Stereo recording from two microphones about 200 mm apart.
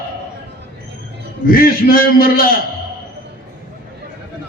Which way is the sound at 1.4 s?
45° left (ahead or behind).